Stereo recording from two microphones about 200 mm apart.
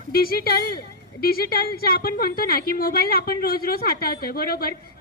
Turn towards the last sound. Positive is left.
turn(degrees=50)  # may be behind; listen again after turning